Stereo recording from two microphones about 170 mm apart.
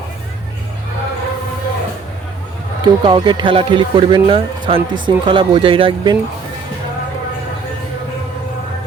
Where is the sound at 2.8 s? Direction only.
25° right (ahead or behind).